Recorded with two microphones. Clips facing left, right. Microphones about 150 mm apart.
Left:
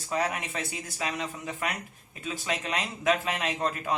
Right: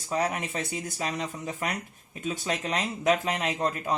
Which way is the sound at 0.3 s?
35° right (ahead or behind).